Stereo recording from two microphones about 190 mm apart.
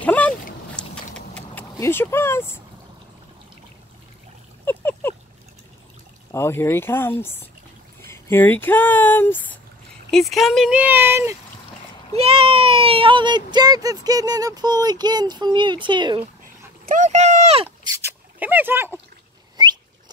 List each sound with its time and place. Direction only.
0.0 s boat: 10° left (ahead or behind)
0.7 s vehicle: 5° left (ahead or behind)
4.6 s a sound: 10° left (ahead or behind)
6.3 s speech: 15° left (ahead or behind); by 11.3 s 15° right (ahead or behind)
12.2 s speech: 30° right (ahead or behind)
16.8 s speech: 40° right (ahead or behind)
17.9 s a sound: 10° right (ahead or behind)